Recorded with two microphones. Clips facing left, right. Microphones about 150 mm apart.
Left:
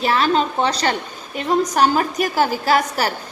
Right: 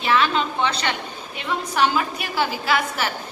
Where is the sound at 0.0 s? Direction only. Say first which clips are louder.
Left 3 dB; 40° left (ahead or behind).